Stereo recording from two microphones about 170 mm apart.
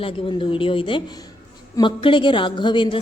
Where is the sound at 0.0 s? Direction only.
30° left (ahead or behind).